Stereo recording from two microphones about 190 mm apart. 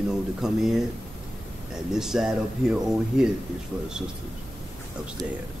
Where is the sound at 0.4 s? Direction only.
5° right (ahead or behind).